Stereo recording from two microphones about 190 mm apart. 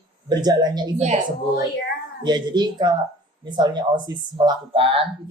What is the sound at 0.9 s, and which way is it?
Speech, 35° right (ahead or behind).